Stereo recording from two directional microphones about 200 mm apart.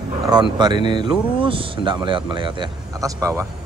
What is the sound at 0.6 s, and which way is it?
Speech, 20° right (ahead or behind).